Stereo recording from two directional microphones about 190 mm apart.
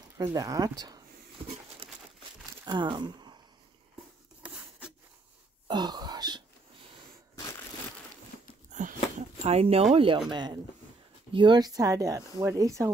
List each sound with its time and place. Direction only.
0.2 s speech: 20° right (ahead or behind)
1.8 s crumpling: 30° right (ahead or behind)
2.6 s speech: 25° right (ahead or behind)
4.4 s a sound: 5° right (ahead or behind)
5.7 s throat clearing: 25° right (ahead or behind)
7.3 s crushing: 15° left (ahead or behind)
8.7 s a sound: 40° right (ahead or behind)
9.4 s speech: 35° right (ahead or behind); by 12.9 s 15° right (ahead or behind)